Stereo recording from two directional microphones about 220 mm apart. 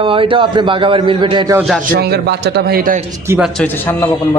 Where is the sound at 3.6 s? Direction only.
10° left (ahead or behind).